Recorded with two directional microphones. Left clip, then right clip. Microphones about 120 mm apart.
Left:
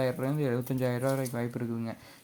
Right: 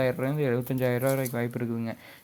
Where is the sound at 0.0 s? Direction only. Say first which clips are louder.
Right 3 dB; 30° right (ahead or behind).